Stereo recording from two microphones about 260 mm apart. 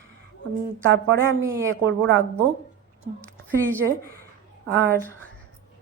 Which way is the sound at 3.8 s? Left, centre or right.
Right.